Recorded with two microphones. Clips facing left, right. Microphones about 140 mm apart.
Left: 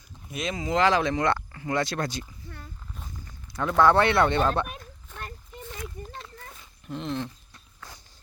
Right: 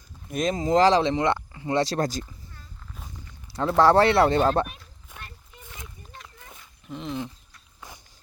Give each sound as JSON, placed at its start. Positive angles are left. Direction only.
{"t": 0.3, "sound": "speech", "side_deg": -45}
{"t": 3.5, "sound": "speech", "side_deg": -30}
{"t": 6.8, "sound": "speech", "side_deg": 0}